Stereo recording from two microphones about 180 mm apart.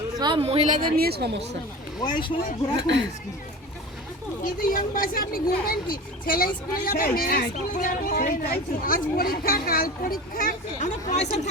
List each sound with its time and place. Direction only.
0.2 s speech: 25° right (ahead or behind)
0.8 s speech: 55° right (ahead or behind)
2.0 s speech: 25° left (ahead or behind)
2.8 s speech: 85° right
4.4 s speech: 50° left (ahead or behind)